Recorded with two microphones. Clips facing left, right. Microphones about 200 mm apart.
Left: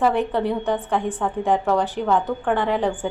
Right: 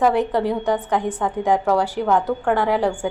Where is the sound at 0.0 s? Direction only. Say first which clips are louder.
Right 2 dB; 10° right (ahead or behind).